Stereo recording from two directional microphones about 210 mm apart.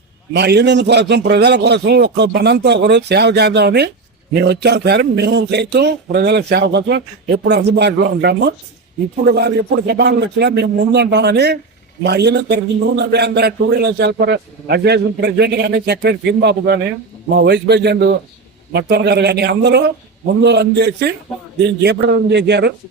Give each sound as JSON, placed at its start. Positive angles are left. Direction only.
{"t": 0.3, "sound": "a man's voice", "side_deg": -55}